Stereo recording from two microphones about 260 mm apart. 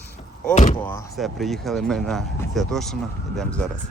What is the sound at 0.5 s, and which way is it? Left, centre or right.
Speech, left.